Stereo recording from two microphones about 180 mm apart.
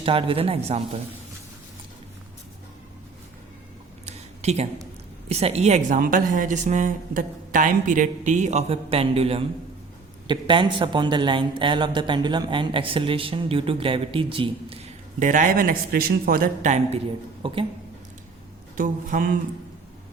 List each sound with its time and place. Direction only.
0.0 s speech: 30° right (ahead or behind)
4.0 s a sound: 35° right (ahead or behind)
5.3 s a woman's voice: 35° right (ahead or behind)
17.4 s speech: 30° right (ahead or behind)
18.8 s a woman's voice: 50° right (ahead or behind)